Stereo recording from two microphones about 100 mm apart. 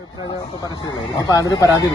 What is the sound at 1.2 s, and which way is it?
Speech, 35° left (ahead or behind).